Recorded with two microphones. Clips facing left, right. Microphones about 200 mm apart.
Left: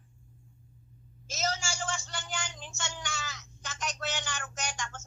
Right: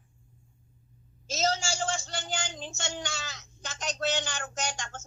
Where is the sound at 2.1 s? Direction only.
30° right (ahead or behind).